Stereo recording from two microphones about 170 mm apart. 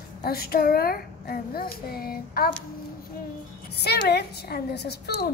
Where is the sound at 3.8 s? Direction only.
75° left (ahead or behind).